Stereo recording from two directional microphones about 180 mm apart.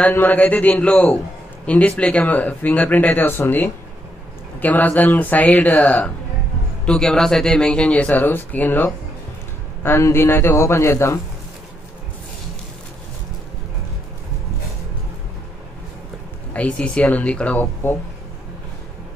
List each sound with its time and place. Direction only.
0.0 s speech: 10° left (ahead or behind)
16.5 s speech: 5° left (ahead or behind)